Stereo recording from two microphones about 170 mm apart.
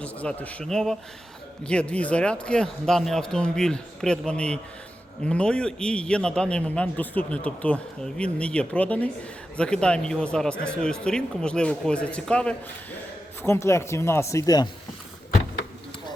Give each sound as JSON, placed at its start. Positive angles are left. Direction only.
{"t": 0.0, "sound": "a man's voice", "side_deg": 10}